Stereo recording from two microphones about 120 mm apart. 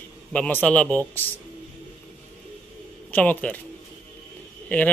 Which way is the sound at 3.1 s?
15° left (ahead or behind).